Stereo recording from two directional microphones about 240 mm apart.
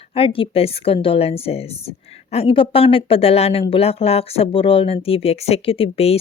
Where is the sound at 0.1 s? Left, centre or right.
Left.